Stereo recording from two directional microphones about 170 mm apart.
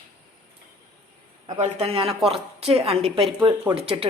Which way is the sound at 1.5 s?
35° right (ahead or behind).